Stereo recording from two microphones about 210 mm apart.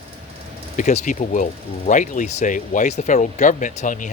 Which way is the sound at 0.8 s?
35° left (ahead or behind).